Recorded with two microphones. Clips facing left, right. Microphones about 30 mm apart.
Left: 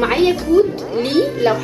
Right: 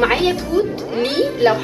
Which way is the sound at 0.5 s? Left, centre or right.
Centre.